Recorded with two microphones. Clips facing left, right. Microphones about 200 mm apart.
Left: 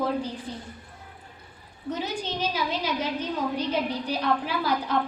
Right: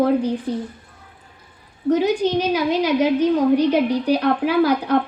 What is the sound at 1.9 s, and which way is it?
A woman's voice, 60° right (ahead or behind).